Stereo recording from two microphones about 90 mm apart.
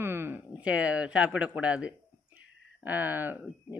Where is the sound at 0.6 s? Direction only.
15° right (ahead or behind).